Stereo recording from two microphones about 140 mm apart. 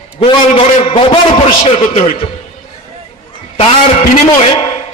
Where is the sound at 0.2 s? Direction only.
40° left (ahead or behind).